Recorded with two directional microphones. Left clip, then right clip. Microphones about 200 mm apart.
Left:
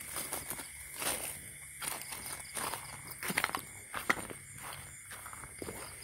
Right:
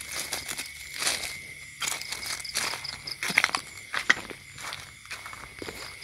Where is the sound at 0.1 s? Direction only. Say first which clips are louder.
Right 9 dB; 20° right (ahead or behind).